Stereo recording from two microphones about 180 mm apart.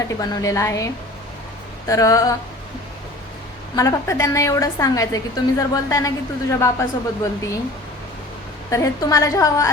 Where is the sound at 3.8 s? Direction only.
15° left (ahead or behind).